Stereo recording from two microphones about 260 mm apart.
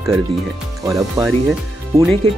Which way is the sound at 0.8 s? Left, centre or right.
Centre.